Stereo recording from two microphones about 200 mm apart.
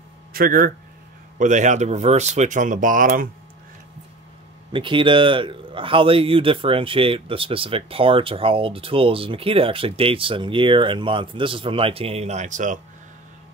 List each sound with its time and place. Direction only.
0.3 s speech: 45° right (ahead or behind)
4.7 s a man's voice: 25° right (ahead or behind)